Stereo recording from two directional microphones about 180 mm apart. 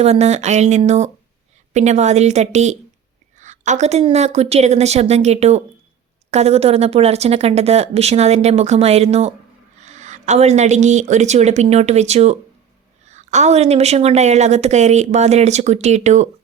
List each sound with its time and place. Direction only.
0.0 s a woman's voice: 35° right (ahead or behind)